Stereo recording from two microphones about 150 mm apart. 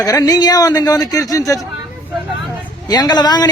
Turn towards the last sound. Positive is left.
turn(degrees=25)  # may be behind; listen again after turning